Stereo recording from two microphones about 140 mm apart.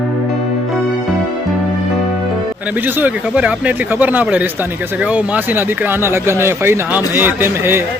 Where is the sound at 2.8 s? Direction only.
10° right (ahead or behind).